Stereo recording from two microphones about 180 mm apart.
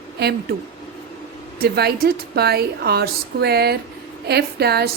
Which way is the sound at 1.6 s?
60° right (ahead or behind).